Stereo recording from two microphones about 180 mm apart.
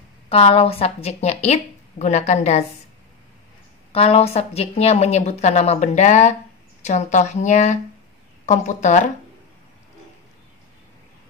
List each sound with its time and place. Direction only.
0.3 s speech: 35° left (ahead or behind)
3.9 s speech: 35° left (ahead or behind)